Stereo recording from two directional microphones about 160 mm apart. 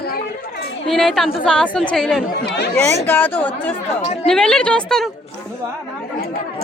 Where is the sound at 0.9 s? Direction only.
Centre (ahead or behind).